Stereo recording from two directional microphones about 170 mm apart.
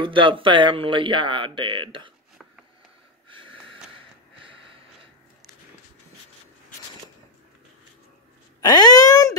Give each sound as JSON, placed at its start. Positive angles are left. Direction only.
{"t": 0.0, "sound": "speech", "side_deg": -30}
{"t": 3.3, "sound": "a sound", "side_deg": -30}
{"t": 8.5, "sound": "speech", "side_deg": 20}